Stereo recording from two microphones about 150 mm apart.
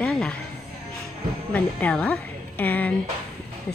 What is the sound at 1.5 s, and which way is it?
Speech, 10° left (ahead or behind).